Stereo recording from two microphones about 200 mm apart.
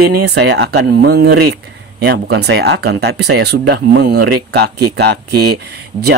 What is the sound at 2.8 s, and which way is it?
Speech, 90° right.